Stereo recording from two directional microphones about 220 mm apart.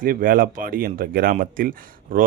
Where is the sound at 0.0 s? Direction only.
40° right (ahead or behind).